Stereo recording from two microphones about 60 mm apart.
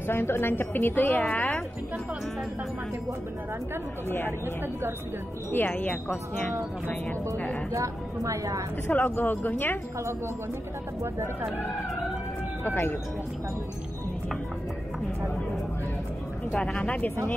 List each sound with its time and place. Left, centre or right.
0.1 s a woman's voice: left
5.5 s a woman's voice: left
7.7 s a woman's voice: right
8.8 s a woman's voice: left
12.6 s a woman's voice: left
16.5 s speech: centre
16.8 s speech: centre